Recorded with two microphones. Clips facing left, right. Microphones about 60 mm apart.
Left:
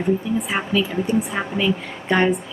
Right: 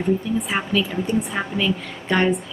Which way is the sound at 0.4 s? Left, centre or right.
Centre.